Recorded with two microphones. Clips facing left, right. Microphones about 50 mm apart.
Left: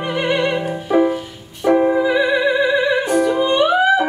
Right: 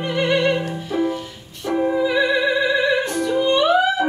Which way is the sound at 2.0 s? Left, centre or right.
Centre.